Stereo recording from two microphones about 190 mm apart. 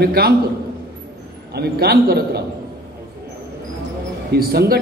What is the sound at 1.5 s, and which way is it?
Speech, 55° right (ahead or behind).